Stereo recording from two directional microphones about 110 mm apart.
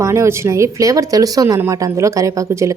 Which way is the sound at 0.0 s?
25° right (ahead or behind).